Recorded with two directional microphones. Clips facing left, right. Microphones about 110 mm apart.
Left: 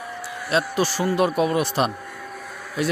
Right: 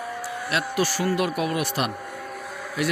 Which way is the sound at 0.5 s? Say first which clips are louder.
Left 4 dB; 25° left (ahead or behind).